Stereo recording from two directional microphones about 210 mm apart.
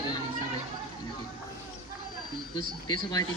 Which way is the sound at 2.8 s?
20° left (ahead or behind).